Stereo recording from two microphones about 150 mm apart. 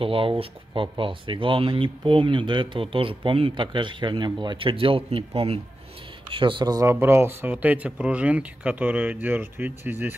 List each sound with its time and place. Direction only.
0.0 s speech: 35° right (ahead or behind); by 10.1 s 15° right (ahead or behind)